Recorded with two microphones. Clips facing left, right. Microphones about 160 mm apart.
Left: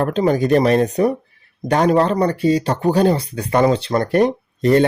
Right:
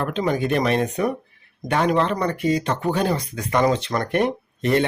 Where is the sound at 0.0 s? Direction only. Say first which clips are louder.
Left 6 dB; 40° left (ahead or behind).